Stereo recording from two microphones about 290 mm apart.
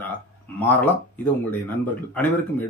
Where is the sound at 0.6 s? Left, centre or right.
Centre.